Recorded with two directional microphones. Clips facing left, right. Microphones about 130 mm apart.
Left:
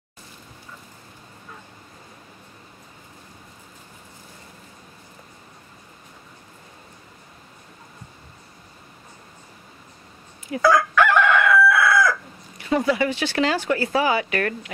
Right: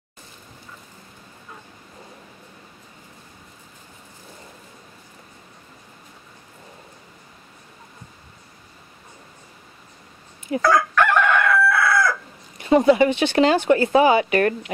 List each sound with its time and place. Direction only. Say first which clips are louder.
10.6 s chicken: left 1 dB; centre (ahead or behind)
12.5 s speech: right 6 dB; 25° right (ahead or behind)